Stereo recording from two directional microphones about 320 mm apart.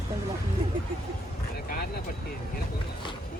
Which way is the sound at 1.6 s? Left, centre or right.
Left.